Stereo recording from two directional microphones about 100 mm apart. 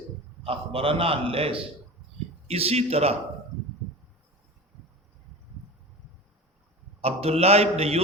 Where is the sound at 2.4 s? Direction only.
85° right.